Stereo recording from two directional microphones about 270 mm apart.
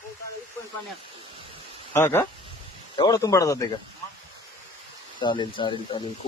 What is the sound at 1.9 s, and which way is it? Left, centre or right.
Speech, centre.